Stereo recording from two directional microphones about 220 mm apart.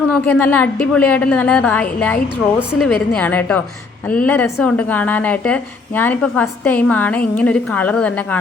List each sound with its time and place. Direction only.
0.1 s a woman's voice: 10° left (ahead or behind)